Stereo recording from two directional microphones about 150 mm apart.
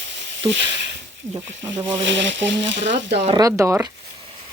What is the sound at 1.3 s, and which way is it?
Speech, 25° right (ahead or behind).